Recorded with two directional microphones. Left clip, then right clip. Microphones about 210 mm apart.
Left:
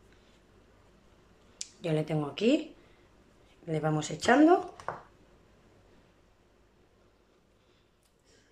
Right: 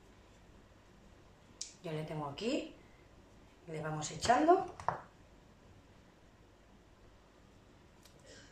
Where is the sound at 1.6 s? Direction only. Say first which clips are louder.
Left 11 dB; 45° left (ahead or behind).